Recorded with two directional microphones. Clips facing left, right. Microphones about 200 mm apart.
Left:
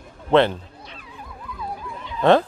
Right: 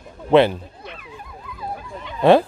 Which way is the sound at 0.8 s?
60° right (ahead or behind).